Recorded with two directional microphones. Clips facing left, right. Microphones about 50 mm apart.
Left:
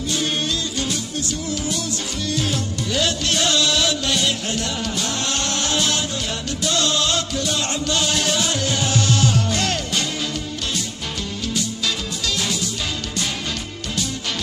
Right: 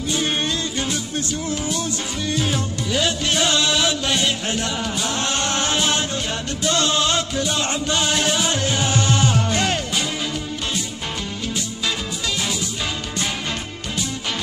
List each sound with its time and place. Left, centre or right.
0.1 s music: right
2.3 s music: centre
11.5 s music: centre